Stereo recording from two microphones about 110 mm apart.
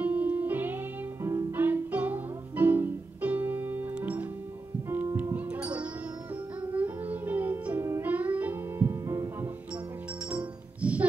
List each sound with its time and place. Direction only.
0.0 s music: 15° right (ahead or behind)
7.8 s music: 25° right (ahead or behind)
8.1 s music: 15° right (ahead or behind)
10.3 s music: 10° right (ahead or behind)